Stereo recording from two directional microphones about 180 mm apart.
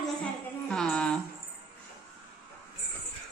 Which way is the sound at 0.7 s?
5° left (ahead or behind).